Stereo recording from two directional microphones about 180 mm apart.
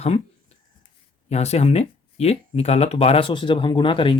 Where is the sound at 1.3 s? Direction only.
35° left (ahead or behind).